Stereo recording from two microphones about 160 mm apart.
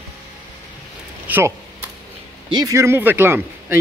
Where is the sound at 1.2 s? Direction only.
10° right (ahead or behind).